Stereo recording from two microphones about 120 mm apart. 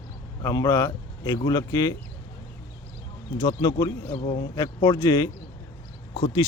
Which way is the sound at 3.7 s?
30° left (ahead or behind).